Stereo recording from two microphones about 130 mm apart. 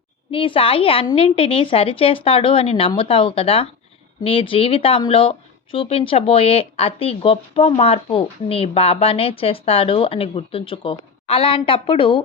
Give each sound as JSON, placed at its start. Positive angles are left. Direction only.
{"t": 0.3, "sound": "a woman's voice", "side_deg": 45}